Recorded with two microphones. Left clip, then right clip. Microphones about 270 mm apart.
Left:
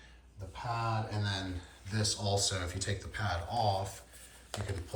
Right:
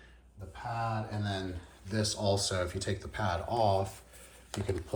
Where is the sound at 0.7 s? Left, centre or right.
Centre.